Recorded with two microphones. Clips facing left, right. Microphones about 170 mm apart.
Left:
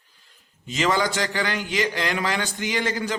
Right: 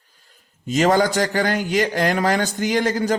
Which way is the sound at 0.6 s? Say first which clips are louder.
Right 6 dB; 45° right (ahead or behind).